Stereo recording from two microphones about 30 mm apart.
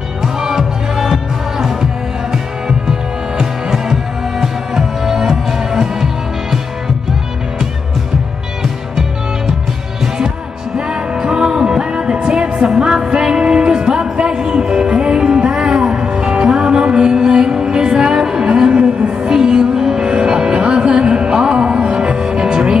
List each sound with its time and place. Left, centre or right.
0.2 s music: centre
2.9 s music: centre
10.9 s music: right
18.5 s a sound: right
19.3 s music: right